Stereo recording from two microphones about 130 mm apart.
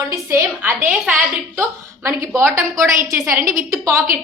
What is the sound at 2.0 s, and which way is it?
A woman's voice, 20° right (ahead or behind).